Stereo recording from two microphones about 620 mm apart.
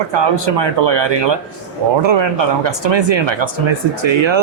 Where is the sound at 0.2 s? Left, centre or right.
Right.